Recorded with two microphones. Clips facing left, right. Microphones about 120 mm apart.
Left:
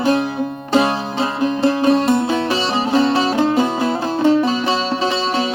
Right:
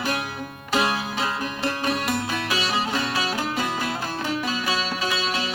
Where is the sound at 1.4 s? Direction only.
30° left (ahead or behind).